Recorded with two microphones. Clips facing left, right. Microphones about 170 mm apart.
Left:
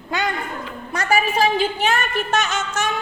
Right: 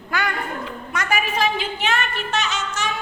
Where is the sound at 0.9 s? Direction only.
30° left (ahead or behind).